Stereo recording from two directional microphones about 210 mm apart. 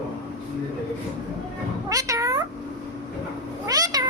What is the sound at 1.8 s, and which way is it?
Cat, 15° right (ahead or behind).